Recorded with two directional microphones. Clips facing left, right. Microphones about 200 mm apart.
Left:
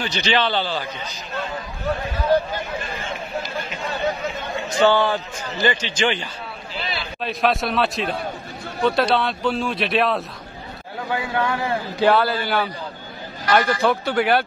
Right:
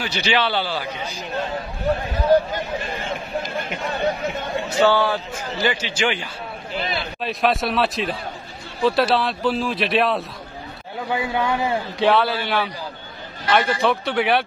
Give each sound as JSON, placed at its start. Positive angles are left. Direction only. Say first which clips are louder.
{"t": 0.0, "sound": "a man's voice", "louder": "even", "side_deg": -10}
{"t": 4.6, "sound": "a man's voice", "louder": "left 1 dB", "side_deg": -10}
{"t": 6.8, "sound": "a sound", "louder": "right 3 dB", "side_deg": -50}
{"t": 7.2, "sound": "speech", "louder": "even", "side_deg": 0}
{"t": 11.1, "sound": "a man's voice", "louder": "right 1 dB", "side_deg": -20}
{"t": 12.0, "sound": "speech", "louder": "left 1 dB", "side_deg": 0}